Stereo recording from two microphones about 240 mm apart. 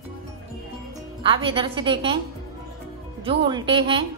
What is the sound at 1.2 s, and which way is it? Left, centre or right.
Speech, right.